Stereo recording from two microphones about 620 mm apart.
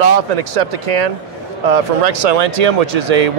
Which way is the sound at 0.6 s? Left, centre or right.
Right.